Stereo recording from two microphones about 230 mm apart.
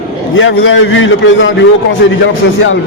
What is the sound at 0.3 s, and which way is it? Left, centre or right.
A man's voice, left.